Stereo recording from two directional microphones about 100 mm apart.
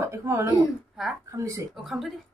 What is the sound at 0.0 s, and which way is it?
A woman's voice, 25° right (ahead or behind).